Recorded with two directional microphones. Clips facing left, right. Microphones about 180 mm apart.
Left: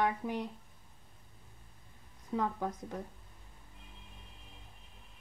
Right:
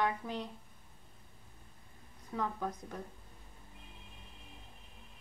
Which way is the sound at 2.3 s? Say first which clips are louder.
Left 3 dB; 15° left (ahead or behind).